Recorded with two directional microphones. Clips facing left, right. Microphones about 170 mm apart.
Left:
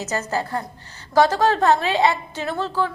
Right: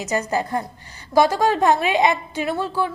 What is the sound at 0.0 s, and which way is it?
A woman's voice, 15° right (ahead or behind).